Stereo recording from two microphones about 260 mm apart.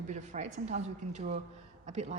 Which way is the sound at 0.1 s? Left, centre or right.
Right.